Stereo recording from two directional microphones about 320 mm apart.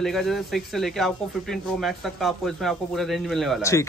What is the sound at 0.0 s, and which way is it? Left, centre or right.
Speech, centre.